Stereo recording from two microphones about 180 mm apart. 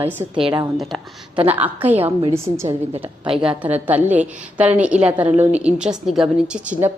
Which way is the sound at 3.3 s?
30° right (ahead or behind).